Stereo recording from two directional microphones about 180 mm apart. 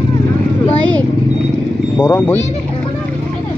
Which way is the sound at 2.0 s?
10° left (ahead or behind).